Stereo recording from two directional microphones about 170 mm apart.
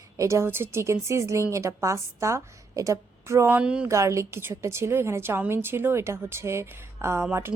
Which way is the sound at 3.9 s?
15° right (ahead or behind).